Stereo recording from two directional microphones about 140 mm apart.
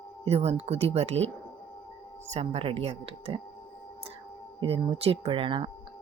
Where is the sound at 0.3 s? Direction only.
45° right (ahead or behind).